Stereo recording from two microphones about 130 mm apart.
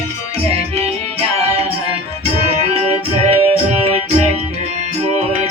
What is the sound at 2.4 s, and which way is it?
Music, 55° right (ahead or behind).